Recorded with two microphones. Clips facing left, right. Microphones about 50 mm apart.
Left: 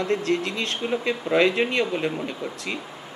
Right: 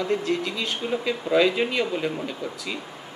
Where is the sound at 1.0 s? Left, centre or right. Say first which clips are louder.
Even; left.